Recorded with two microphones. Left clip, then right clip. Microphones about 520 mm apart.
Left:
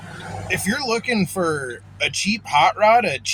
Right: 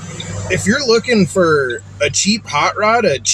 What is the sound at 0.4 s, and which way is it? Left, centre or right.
Speech, left.